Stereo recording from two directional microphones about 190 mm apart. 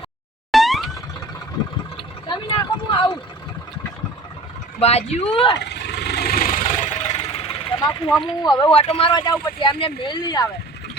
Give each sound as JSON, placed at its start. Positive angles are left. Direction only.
{"t": 0.5, "sound": "boing", "side_deg": 0}
{"t": 2.9, "sound": "speech", "side_deg": 25}
{"t": 4.8, "sound": "speech", "side_deg": 35}
{"t": 5.7, "sound": "vehicle", "side_deg": 60}